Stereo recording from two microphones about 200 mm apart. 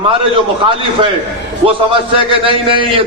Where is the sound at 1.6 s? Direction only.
25° right (ahead or behind).